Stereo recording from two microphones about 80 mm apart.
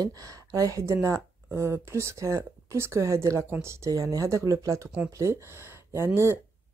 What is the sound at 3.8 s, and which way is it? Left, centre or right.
Speech, right.